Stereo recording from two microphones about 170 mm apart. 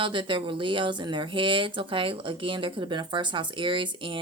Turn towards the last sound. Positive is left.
turn(degrees=-30)  # may be behind; listen again after turning